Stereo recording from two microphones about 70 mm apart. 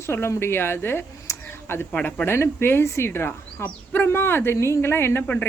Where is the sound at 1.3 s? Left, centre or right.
Left.